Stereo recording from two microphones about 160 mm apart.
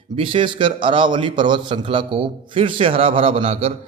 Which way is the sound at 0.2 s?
35° right (ahead or behind).